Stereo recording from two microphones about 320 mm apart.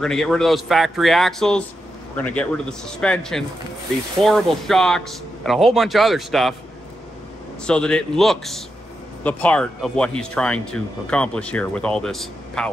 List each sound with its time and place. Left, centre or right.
0.0 s speech: centre
7.6 s speech: centre